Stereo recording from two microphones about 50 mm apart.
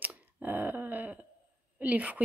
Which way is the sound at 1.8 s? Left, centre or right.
Right.